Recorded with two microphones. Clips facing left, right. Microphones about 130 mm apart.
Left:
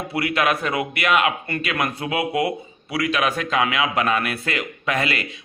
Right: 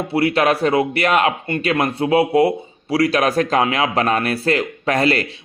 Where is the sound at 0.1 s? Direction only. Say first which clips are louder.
Right 5 dB; 30° right (ahead or behind).